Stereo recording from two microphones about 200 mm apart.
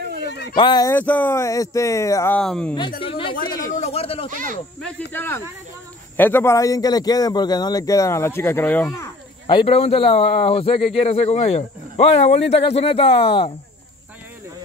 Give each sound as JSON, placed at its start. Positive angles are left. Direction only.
{"t": 0.3, "sound": "a sound", "side_deg": 55}
{"t": 0.6, "sound": "speech", "side_deg": 20}
{"t": 0.9, "sound": "a man's voice", "side_deg": 10}
{"t": 3.0, "sound": "speech", "side_deg": 25}
{"t": 4.3, "sound": "speech", "side_deg": -40}
{"t": 4.8, "sound": "a man's voice", "side_deg": 10}
{"t": 9.5, "sound": "speech", "side_deg": 25}